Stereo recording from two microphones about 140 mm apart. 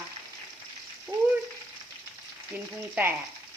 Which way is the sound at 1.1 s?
15° right (ahead or behind).